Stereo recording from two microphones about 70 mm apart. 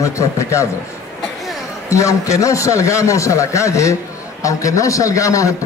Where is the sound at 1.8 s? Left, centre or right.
Left.